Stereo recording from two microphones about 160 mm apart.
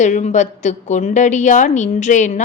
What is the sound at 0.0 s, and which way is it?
A woman's voice, 45° left (ahead or behind).